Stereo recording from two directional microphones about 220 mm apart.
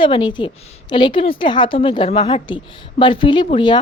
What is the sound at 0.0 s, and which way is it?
Speech, 20° left (ahead or behind).